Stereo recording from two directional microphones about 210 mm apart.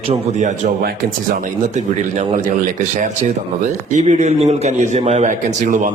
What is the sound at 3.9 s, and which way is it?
A man's voice, 35° right (ahead or behind).